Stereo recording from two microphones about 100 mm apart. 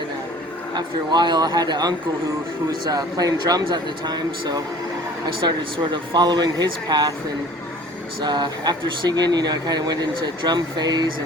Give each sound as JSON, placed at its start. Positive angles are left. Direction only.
{"t": 0.7, "sound": "speech", "side_deg": -45}
{"t": 8.2, "sound": "speech", "side_deg": -45}